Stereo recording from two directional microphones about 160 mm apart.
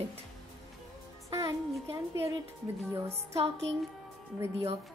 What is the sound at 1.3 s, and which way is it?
Speech, 20° right (ahead or behind).